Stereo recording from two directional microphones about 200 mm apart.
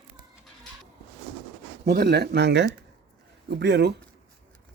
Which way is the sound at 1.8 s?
45° right (ahead or behind).